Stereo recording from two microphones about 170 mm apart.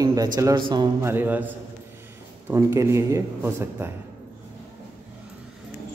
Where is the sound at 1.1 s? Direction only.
10° right (ahead or behind).